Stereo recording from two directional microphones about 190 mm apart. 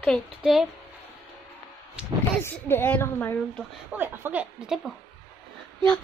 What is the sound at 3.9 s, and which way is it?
Speech, 10° right (ahead or behind).